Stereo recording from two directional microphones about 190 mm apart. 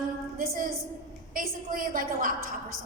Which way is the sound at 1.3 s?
45° right (ahead or behind).